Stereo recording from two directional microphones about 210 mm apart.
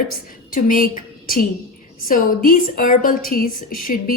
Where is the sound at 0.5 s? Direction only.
40° left (ahead or behind).